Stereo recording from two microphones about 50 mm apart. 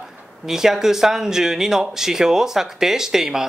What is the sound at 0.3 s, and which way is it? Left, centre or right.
Speech, centre.